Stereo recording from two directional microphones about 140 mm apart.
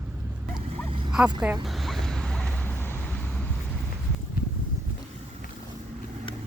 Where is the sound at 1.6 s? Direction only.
Centre (ahead or behind).